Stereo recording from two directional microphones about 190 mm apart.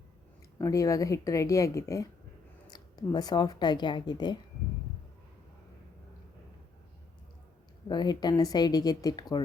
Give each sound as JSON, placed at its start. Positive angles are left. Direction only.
{"t": 0.6, "sound": "speech", "side_deg": 15}
{"t": 7.9, "sound": "speech", "side_deg": 20}